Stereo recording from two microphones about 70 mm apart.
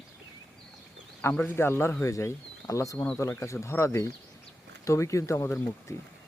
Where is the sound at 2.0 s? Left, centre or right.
Left.